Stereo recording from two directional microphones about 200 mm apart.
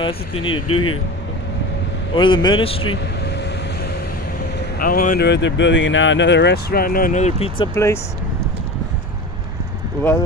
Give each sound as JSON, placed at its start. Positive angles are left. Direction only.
{"t": 0.0, "sound": "a man's voice", "side_deg": 25}
{"t": 0.6, "sound": "speech", "side_deg": 90}
{"t": 2.1, "sound": "a man's voice", "side_deg": 25}
{"t": 2.8, "sound": "vehicle", "side_deg": 75}
{"t": 4.7, "sound": "speech", "side_deg": 45}